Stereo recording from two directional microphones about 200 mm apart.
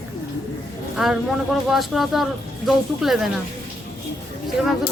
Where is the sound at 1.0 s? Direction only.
Centre (ahead or behind).